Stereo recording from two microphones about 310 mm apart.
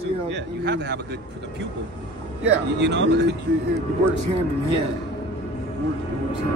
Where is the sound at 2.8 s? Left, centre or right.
Right.